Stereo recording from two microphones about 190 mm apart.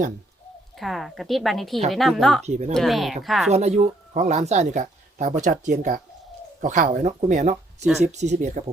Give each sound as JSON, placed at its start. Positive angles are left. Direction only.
{"t": 0.8, "sound": "a woman's voice", "side_deg": 0}
{"t": 2.5, "sound": "speech", "side_deg": -35}
{"t": 2.7, "sound": "a woman's voice", "side_deg": 0}
{"t": 3.5, "sound": "speech", "side_deg": -35}